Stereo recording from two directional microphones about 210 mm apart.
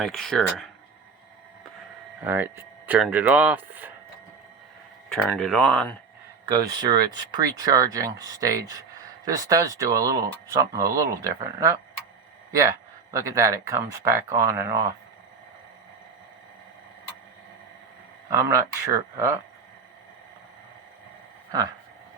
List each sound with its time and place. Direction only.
0.0 s speech: centre (ahead or behind)
2.2 s speech: 10° right (ahead or behind)
5.0 s speech: centre (ahead or behind)
6.5 s speech: 20° right (ahead or behind)
18.3 s speech: 15° right (ahead or behind)